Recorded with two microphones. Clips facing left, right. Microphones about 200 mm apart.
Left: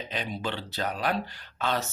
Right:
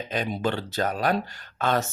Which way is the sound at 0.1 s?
45° right (ahead or behind).